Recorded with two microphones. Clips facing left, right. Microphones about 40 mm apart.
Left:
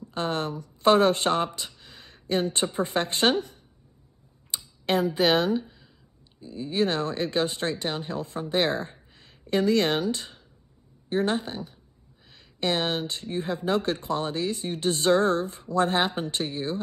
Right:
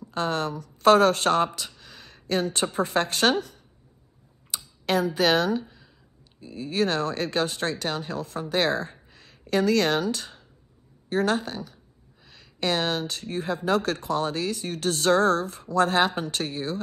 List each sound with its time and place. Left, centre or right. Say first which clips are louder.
0.1 s speech: right 2 dB; left
1.8 s a sound: right 2 dB; left
2.9 s speech: right 1 dB; centre
4.8 s speech: even; left
6.4 s speech: even; right
6.7 s speech: right 1 dB; left
9.1 s a sound: right 2 dB; left
9.7 s speech: even; left